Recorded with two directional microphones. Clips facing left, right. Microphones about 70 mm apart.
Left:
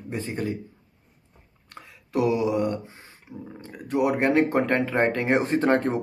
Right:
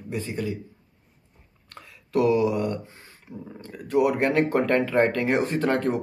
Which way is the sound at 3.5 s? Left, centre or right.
Left.